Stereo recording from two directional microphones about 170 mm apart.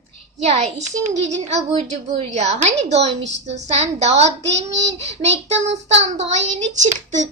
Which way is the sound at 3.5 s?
40° right (ahead or behind).